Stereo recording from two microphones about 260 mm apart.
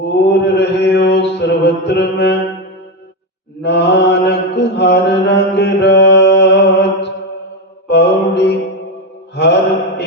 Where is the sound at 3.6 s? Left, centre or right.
Left.